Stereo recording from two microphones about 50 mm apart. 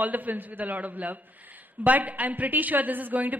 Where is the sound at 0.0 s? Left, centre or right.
Right.